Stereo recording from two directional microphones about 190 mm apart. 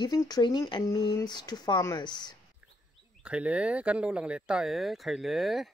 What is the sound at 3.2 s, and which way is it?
Speech, 5° right (ahead or behind).